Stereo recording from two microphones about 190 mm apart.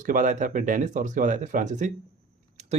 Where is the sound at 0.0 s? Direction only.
40° right (ahead or behind).